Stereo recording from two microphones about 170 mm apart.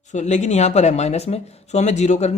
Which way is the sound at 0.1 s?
45° left (ahead or behind).